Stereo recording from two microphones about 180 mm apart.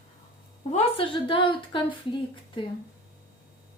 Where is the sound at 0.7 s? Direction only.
30° left (ahead or behind).